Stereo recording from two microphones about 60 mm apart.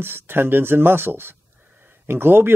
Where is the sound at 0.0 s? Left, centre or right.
Right.